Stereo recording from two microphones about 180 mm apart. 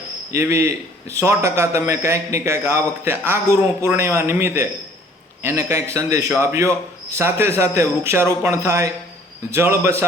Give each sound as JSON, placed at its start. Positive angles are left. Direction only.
{"t": 0.3, "sound": "a man's voice", "side_deg": -15}